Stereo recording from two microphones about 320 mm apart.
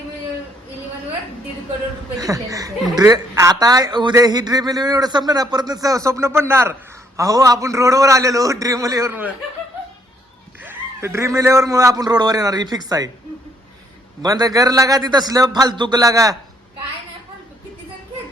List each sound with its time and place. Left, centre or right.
2.1 s speech: centre
10.6 s a man's voice: centre
14.2 s speech: centre